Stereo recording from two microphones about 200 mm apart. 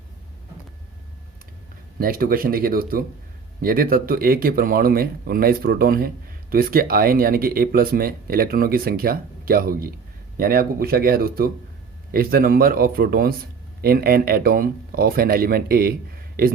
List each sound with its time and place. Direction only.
2.0 s speech: 45° right (ahead or behind)